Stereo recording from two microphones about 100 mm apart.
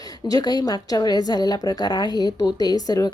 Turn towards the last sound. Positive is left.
turn(degrees=40)  # may be behind; listen again after turning